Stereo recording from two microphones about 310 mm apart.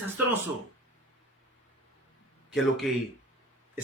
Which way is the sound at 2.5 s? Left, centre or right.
Centre.